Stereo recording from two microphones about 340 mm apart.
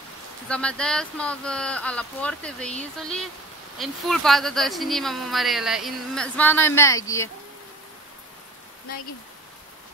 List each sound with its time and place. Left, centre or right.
0.5 s a woman's voice: centre